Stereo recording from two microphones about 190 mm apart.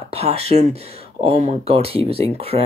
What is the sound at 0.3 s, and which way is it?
Speech, 35° right (ahead or behind).